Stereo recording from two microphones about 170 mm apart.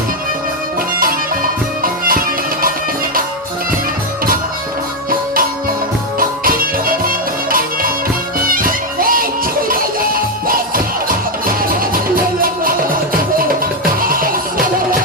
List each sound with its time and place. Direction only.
1.8 s music: 55° right (ahead or behind)
6.1 s music: 55° right (ahead or behind)
12.1 s music: 55° right (ahead or behind)
14.0 s music: 55° right (ahead or behind)